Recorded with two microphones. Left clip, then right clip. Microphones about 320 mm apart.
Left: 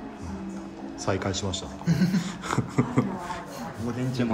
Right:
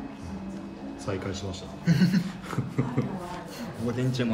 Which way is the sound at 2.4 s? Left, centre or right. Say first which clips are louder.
Left 5 dB; centre.